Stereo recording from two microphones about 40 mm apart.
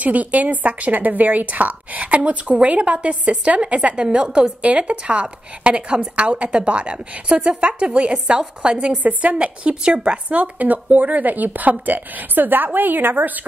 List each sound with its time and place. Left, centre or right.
0.0 s a woman's voice: right
10.4 s a woman's voice: right